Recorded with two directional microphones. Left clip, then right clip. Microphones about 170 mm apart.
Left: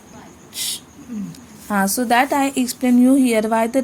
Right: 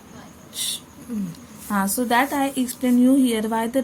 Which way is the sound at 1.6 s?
35° left (ahead or behind).